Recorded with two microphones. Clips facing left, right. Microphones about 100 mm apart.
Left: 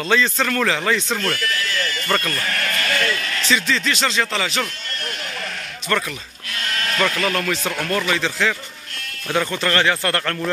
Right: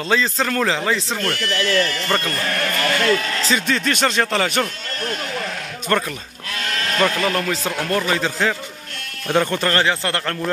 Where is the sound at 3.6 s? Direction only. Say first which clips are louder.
Right 2 dB; 50° right (ahead or behind).